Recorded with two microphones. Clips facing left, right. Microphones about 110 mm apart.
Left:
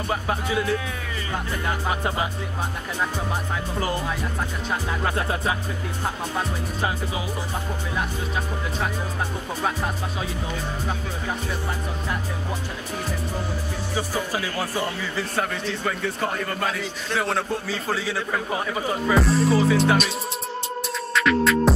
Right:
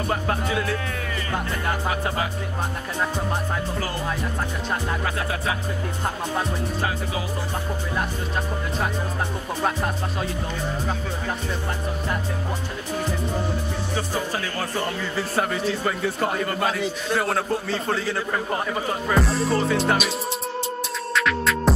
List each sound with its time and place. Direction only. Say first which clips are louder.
0.1 s music: left 1 dB; 5° left (ahead or behind)
5.0 s music: left 2 dB; 25° left (ahead or behind)
13.9 s music: left 1 dB; 10° left (ahead or behind)
15.1 s a man's voice: right 3 dB; 5° right (ahead or behind)
21.1 s music: left 3 dB; centre (ahead or behind)